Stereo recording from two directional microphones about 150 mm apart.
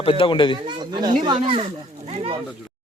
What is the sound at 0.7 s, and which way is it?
Speech, 30° right (ahead or behind).